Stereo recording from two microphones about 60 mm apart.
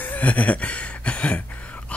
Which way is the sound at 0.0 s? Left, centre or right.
Left.